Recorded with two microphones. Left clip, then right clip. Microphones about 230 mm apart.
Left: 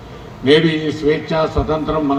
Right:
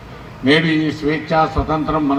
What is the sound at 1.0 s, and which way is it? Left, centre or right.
A man's voice, left.